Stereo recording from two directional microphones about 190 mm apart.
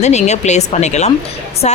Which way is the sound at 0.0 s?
35° left (ahead or behind).